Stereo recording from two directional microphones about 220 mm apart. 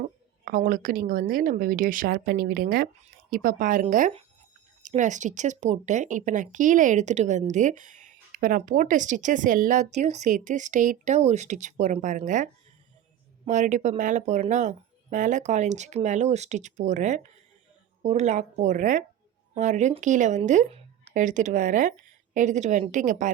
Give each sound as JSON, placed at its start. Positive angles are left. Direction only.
{"t": 0.0, "sound": "speech", "side_deg": -40}